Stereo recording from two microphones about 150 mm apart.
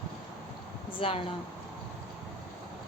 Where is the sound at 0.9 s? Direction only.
35° left (ahead or behind).